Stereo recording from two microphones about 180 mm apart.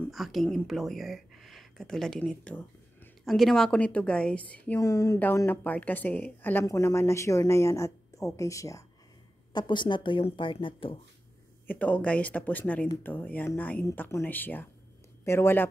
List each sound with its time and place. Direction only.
0.1 s a woman's voice: centre (ahead or behind); by 11.0 s 30° left (ahead or behind)
11.6 s a woman's voice: 10° left (ahead or behind)